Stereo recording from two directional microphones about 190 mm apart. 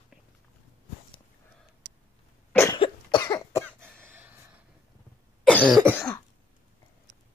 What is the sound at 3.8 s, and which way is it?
Cough, 10° right (ahead or behind).